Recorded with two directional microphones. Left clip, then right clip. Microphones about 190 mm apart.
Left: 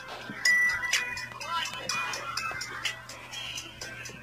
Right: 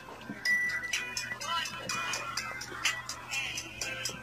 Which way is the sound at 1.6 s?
30° left (ahead or behind).